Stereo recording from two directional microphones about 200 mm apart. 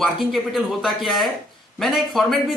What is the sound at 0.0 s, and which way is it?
A man's voice, centre (ahead or behind).